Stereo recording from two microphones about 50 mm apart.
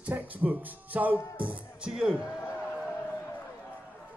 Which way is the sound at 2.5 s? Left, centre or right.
Right.